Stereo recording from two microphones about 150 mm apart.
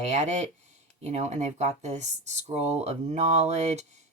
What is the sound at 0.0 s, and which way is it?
Speech, 50° right (ahead or behind).